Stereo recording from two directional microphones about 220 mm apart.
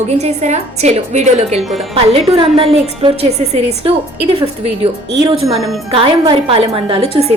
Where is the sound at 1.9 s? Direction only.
25° right (ahead or behind).